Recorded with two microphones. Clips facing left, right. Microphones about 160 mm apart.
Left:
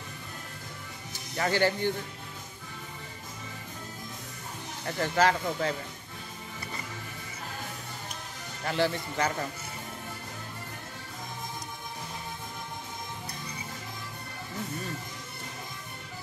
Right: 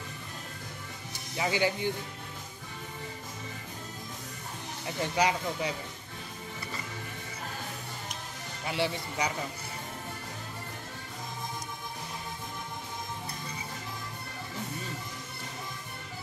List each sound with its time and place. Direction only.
1.3 s speech: 10° right (ahead or behind)
4.8 s speech: 15° right (ahead or behind)
8.6 s speech: 10° right (ahead or behind)